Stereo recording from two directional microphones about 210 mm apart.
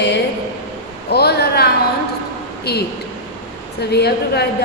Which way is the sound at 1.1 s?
50° left (ahead or behind).